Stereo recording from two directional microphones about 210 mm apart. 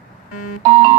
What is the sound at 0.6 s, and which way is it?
Music, 25° right (ahead or behind).